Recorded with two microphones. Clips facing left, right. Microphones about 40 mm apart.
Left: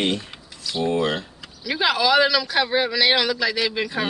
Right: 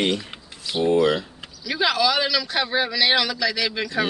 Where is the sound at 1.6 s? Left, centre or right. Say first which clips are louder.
Left 1 dB; centre.